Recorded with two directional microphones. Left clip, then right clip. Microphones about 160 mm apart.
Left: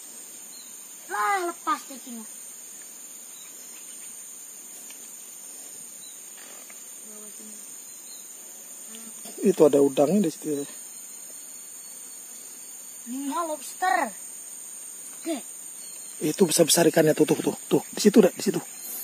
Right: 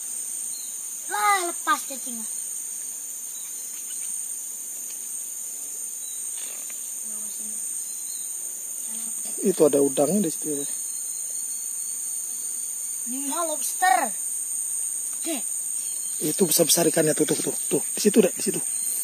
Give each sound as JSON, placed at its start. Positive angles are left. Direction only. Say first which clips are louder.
{"t": 1.1, "sound": "a child's voice", "louder": "right 3 dB", "side_deg": -35}
{"t": 9.4, "sound": "speech", "louder": "left 1 dB", "side_deg": 10}
{"t": 9.7, "sound": "speech", "louder": "left 1 dB", "side_deg": 0}
{"t": 10.4, "sound": "speech", "louder": "left 1 dB", "side_deg": 10}
{"t": 13.3, "sound": "a child's voice", "louder": "right 1 dB", "side_deg": -40}
{"t": 16.2, "sound": "speech", "louder": "left 1 dB", "side_deg": 10}
{"t": 17.6, "sound": "speech", "louder": "left 1 dB", "side_deg": 25}